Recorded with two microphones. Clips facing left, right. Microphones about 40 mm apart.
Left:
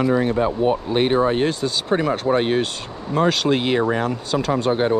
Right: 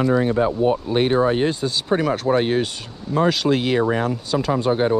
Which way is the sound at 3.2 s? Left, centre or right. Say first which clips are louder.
Even; left.